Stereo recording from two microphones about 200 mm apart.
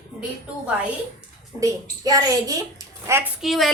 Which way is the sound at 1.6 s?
20° right (ahead or behind).